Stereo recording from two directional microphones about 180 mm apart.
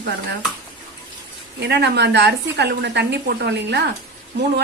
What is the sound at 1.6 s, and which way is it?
Speech, 65° right (ahead or behind).